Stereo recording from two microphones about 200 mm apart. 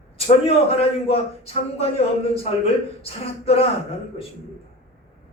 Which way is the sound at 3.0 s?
30° left (ahead or behind).